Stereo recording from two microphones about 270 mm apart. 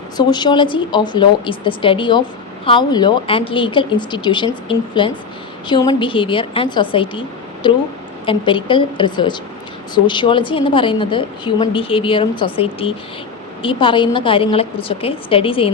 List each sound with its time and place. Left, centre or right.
0.2 s a woman's voice: centre